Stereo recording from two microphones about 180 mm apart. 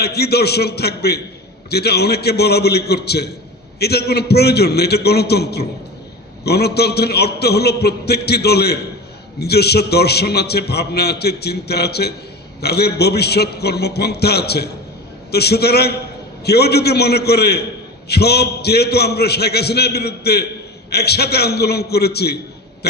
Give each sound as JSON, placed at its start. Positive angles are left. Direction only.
{"t": 0.0, "sound": "a man's voice", "side_deg": 65}